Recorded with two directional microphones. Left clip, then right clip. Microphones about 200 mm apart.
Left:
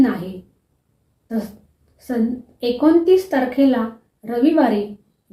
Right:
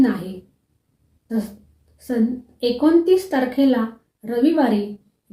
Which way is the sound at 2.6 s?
5° right (ahead or behind).